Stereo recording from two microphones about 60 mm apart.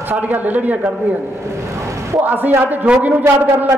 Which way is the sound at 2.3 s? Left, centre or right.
Right.